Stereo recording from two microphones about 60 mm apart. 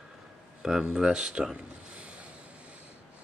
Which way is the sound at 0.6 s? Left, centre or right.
Centre.